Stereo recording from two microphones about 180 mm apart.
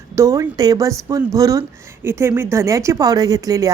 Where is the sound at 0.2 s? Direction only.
15° right (ahead or behind).